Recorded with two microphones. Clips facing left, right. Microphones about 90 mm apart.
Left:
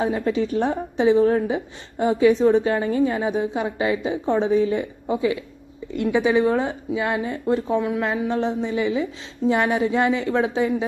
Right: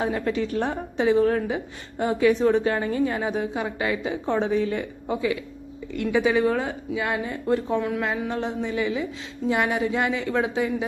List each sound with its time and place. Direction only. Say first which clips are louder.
0.0 s a woman's voice: left 3 dB; 25° left (ahead or behind)